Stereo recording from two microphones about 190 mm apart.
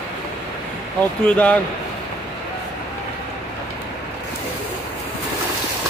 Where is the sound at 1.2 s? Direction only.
5° left (ahead or behind).